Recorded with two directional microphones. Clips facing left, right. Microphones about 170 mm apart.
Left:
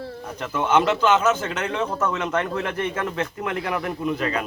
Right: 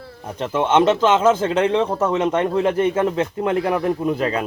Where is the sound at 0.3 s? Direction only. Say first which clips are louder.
Right 4 dB; 25° right (ahead or behind).